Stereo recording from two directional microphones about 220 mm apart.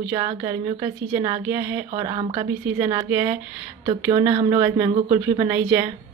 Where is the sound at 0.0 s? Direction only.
15° right (ahead or behind).